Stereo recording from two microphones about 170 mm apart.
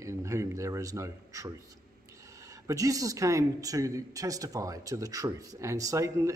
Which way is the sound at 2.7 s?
20° right (ahead or behind).